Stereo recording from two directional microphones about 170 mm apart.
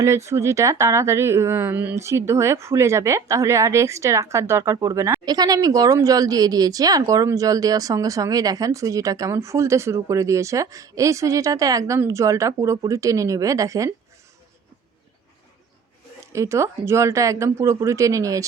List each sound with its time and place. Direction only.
0.0 s speech: 15° right (ahead or behind)
16.2 s speech: 15° right (ahead or behind)